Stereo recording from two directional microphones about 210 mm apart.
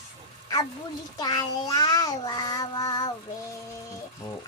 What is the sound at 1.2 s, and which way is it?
Child singing, 20° left (ahead or behind).